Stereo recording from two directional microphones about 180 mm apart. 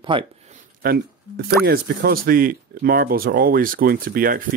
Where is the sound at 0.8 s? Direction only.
60° right (ahead or behind).